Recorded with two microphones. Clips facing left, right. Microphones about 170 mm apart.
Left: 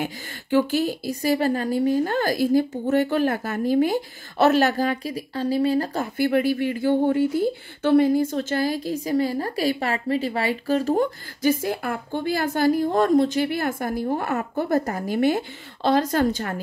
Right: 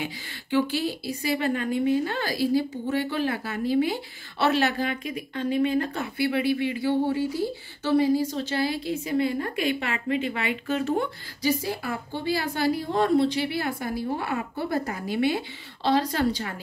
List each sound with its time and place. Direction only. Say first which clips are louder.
0.0 s a woman's voice: left 4 dB; 45° left (ahead or behind)